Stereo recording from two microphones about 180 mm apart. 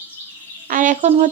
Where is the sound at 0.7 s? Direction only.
45° right (ahead or behind).